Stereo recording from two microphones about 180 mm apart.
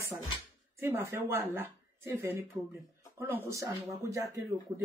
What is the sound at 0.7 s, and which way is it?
Speech, 15° right (ahead or behind).